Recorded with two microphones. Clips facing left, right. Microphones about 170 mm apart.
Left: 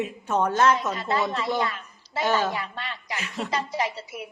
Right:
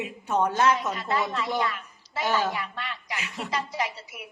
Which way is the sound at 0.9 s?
30° left (ahead or behind).